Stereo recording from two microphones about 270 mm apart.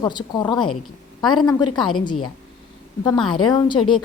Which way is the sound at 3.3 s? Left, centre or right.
Centre.